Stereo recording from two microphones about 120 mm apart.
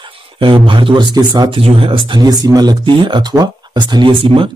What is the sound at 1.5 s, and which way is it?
Speech, 50° right (ahead or behind).